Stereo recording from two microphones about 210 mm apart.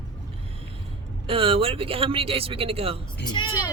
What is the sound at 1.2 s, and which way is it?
Speech, 25° right (ahead or behind).